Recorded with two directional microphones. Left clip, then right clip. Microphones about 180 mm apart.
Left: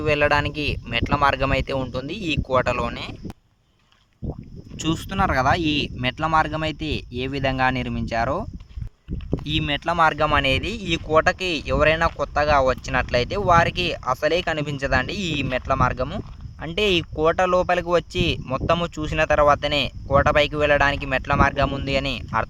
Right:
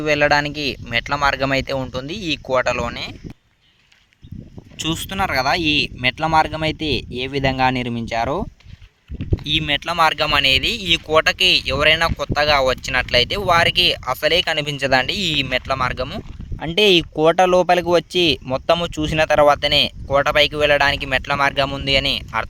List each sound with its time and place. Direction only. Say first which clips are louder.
0.0 s speech: right 3 dB; 15° right (ahead or behind)
4.8 s speech: right 1 dB; 35° right (ahead or behind)
9.6 s speech: right 1 dB; 45° right (ahead or behind)